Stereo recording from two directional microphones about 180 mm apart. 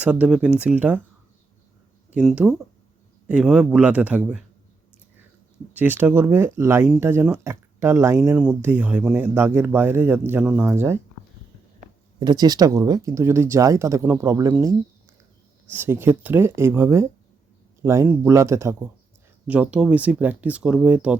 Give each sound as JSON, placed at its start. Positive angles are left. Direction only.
{"t": 0.0, "sound": "speech", "side_deg": -5}
{"t": 2.1, "sound": "a man's voice", "side_deg": -5}
{"t": 5.7, "sound": "speech", "side_deg": -10}
{"t": 12.2, "sound": "speech", "side_deg": -20}